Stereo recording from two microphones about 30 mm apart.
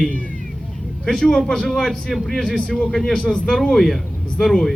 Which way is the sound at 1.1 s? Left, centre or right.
Centre.